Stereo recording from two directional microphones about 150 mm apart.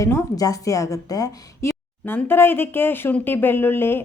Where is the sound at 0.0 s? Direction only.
20° left (ahead or behind).